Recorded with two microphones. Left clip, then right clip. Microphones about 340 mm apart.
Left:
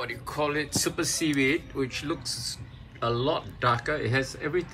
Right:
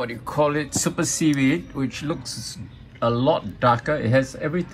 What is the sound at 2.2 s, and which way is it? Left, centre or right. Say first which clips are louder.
Speech: even; centre.